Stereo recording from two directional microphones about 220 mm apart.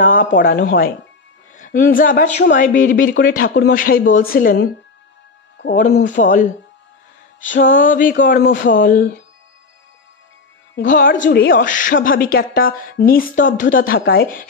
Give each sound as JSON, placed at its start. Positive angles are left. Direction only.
{"t": 0.0, "sound": "speech", "side_deg": 35}
{"t": 5.7, "sound": "speech", "side_deg": 40}
{"t": 7.7, "sound": "speech", "side_deg": 35}
{"t": 10.9, "sound": "speech", "side_deg": 35}